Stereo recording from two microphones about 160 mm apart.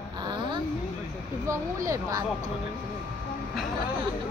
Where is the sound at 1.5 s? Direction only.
20° right (ahead or behind).